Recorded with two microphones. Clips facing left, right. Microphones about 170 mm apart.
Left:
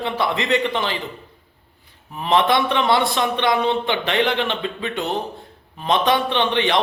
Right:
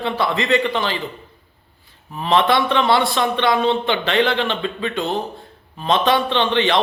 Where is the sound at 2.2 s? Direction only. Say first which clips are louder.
Right 1 dB; 15° left (ahead or behind).